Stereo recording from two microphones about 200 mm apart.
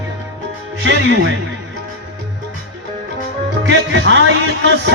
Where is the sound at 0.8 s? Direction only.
65° right (ahead or behind).